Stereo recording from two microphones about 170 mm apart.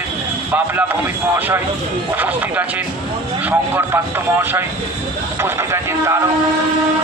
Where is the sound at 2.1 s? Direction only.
10° right (ahead or behind).